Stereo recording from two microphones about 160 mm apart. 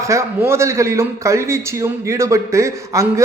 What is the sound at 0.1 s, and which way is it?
A man's voice, 15° right (ahead or behind).